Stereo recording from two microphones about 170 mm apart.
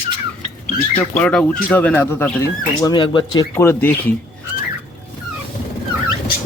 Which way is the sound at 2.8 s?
25° left (ahead or behind).